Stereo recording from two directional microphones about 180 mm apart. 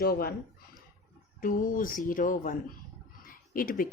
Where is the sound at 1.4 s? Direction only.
50° left (ahead or behind).